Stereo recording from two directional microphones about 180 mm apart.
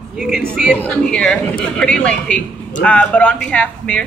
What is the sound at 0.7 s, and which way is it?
Speech, 5° left (ahead or behind).